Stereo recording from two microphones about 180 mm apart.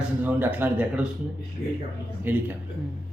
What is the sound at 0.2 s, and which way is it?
Speech, 10° right (ahead or behind).